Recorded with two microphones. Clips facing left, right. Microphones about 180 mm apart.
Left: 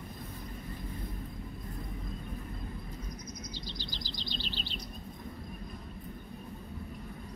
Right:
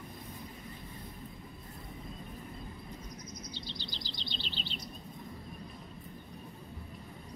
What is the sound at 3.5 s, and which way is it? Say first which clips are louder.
Bird vocalization: left 2 dB; 40° left (ahead or behind).